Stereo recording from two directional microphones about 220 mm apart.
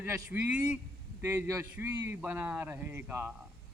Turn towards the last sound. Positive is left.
turn(degrees=-10)  # may be behind; listen again after turning